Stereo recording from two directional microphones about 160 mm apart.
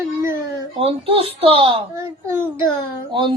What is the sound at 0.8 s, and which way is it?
Speech, 35° right (ahead or behind).